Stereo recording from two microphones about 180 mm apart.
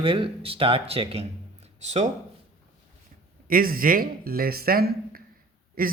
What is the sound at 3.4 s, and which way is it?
Speech, 55° right (ahead or behind).